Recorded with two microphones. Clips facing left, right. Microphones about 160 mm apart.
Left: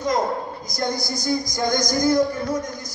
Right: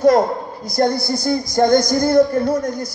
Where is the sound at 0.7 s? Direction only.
60° right (ahead or behind).